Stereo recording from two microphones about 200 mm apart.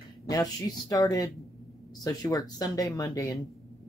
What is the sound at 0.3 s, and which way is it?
Speech, 15° left (ahead or behind).